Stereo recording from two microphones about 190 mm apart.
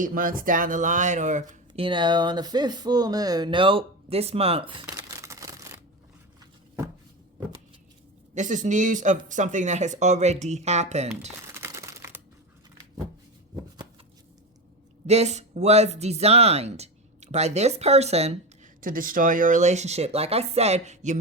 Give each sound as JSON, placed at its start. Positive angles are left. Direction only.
{"t": 0.0, "sound": "speech", "side_deg": -45}
{"t": 5.2, "sound": "a sound", "side_deg": -15}
{"t": 8.4, "sound": "speech", "side_deg": -40}
{"t": 11.5, "sound": "crumpling", "side_deg": -15}
{"t": 15.0, "sound": "speech", "side_deg": -35}